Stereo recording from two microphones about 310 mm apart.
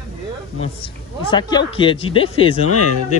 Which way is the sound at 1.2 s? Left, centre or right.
Centre.